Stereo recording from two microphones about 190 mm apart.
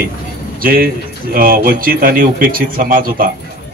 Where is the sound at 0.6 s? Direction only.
50° right (ahead or behind).